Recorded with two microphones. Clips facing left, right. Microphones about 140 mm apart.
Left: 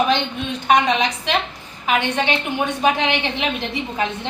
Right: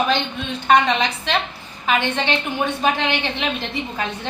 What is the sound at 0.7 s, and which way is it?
A woman's voice, 15° left (ahead or behind).